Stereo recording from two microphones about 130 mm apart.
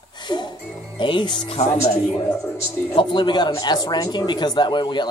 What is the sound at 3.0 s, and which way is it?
Speech, 35° left (ahead or behind).